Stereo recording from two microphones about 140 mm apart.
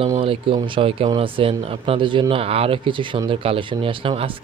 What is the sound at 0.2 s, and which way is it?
Speech, 40° right (ahead or behind).